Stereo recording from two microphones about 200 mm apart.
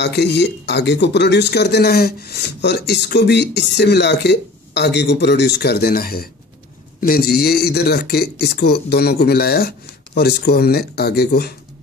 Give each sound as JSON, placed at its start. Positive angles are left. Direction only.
{"t": 0.0, "sound": "speech", "side_deg": 55}